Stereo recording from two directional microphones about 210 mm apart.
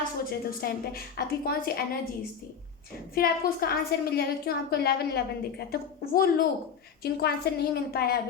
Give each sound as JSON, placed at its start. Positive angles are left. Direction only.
{"t": 0.3, "sound": "a woman's voice", "side_deg": 45}
{"t": 3.2, "sound": "a woman's voice", "side_deg": 45}